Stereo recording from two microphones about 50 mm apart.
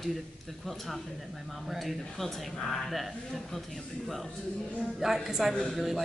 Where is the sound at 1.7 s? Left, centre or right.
Centre.